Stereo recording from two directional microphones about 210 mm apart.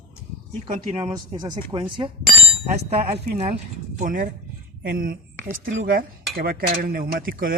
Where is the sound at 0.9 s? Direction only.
25° right (ahead or behind).